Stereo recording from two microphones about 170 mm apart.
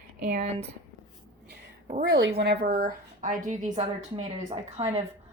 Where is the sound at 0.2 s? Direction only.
60° right (ahead or behind).